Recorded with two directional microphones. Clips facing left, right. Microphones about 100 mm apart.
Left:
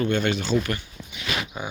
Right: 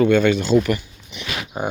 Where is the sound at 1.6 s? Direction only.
45° right (ahead or behind).